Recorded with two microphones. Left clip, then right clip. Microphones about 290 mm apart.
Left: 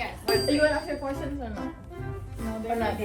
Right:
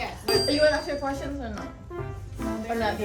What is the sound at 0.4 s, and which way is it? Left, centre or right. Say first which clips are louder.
Speech: right 3 dB; right.